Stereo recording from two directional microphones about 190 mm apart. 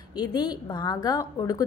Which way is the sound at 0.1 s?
20° left (ahead or behind).